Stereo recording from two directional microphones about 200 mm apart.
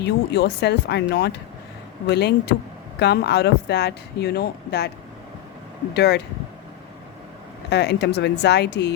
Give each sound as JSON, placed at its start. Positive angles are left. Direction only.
{"t": 0.0, "sound": "speech", "side_deg": 55}
{"t": 5.9, "sound": "speech", "side_deg": 55}
{"t": 7.7, "sound": "speech", "side_deg": 60}